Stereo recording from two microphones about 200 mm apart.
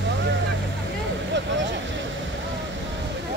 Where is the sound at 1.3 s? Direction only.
65° right (ahead or behind).